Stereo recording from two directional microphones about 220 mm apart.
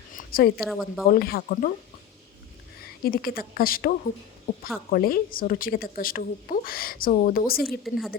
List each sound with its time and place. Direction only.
0.3 s speech: 40° left (ahead or behind)
0.6 s speech: centre (ahead or behind)
1.0 s speech: 45° left (ahead or behind)
2.8 s a woman's voice: 45° left (ahead or behind)
7.9 s speech: centre (ahead or behind)